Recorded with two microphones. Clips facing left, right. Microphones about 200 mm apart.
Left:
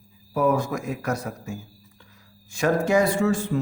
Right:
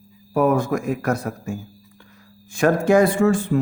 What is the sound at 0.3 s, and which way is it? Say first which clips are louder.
Speech: right 4 dB; 55° right (ahead or behind).